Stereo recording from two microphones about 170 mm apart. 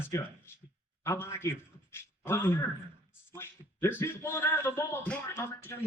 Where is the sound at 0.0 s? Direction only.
15° left (ahead or behind).